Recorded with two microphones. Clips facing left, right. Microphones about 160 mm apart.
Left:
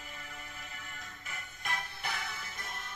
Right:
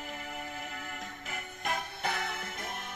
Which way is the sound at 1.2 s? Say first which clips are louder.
Right 5 dB; 90° right.